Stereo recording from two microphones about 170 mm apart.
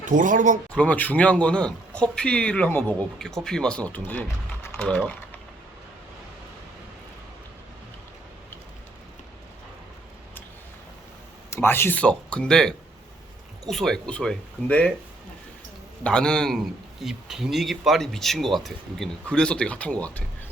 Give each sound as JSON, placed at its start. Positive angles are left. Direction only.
{"t": 0.0, "sound": "speech", "side_deg": -50}
{"t": 0.7, "sound": "a man's voice", "side_deg": 10}
{"t": 11.5, "sound": "a man's voice", "side_deg": 15}
{"t": 16.0, "sound": "speech", "side_deg": 5}